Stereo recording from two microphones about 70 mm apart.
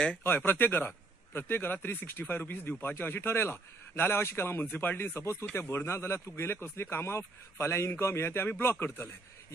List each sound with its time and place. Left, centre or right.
0.5 s a man's voice: left